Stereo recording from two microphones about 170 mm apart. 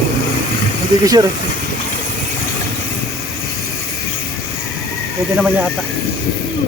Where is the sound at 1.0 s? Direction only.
20° right (ahead or behind).